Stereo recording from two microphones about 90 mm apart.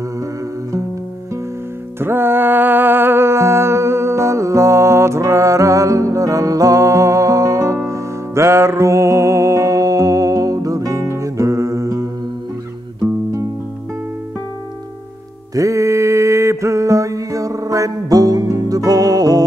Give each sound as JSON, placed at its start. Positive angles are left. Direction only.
{"t": 2.0, "sound": "music", "side_deg": -25}
{"t": 15.5, "sound": "mantra", "side_deg": -35}